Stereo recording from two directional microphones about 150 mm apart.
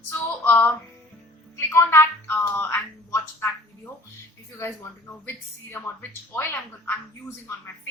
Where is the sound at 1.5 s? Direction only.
15° left (ahead or behind).